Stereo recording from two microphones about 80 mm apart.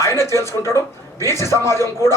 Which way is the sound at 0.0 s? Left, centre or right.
Left.